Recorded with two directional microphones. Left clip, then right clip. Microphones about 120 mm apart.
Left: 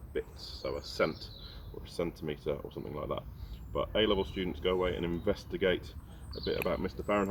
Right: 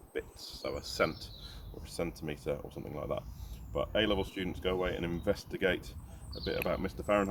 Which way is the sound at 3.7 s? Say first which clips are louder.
Left 1 dB; 80° right.